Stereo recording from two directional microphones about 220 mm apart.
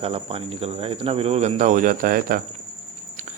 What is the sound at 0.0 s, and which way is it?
Speech, 25° right (ahead or behind).